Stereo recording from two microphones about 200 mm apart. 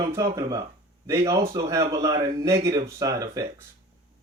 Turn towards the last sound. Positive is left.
turn(degrees=-15)  # may be behind; listen again after turning